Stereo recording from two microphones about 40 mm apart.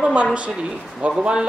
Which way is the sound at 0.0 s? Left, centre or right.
Right.